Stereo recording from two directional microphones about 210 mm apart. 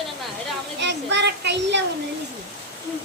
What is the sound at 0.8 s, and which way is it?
A child's voice, 55° right (ahead or behind).